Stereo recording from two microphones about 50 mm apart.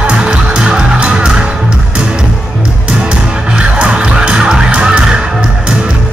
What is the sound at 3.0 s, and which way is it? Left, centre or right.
Music, centre.